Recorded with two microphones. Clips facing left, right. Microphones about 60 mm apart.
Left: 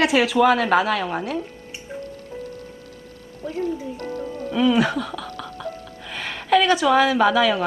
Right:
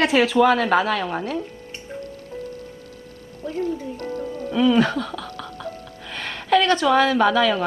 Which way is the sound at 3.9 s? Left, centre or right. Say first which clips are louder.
Right 1 dB; left.